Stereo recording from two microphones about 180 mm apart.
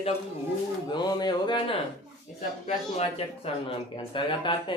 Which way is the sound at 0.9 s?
25° left (ahead or behind).